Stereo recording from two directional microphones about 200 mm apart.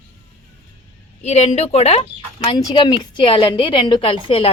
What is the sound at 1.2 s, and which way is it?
Speech, 35° left (ahead or behind).